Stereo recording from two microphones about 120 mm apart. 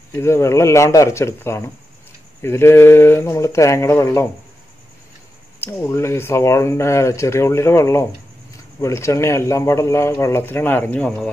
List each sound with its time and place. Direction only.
0.1 s speech: 20° left (ahead or behind)
5.6 s speech: 20° left (ahead or behind)